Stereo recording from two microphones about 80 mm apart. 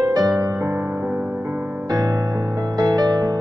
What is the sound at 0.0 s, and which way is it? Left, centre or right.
Music, right.